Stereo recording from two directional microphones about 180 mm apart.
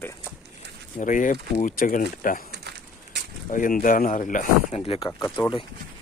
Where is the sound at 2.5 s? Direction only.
70° right (ahead or behind).